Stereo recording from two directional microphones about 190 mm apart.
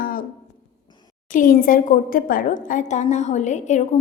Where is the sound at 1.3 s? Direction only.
45° left (ahead or behind).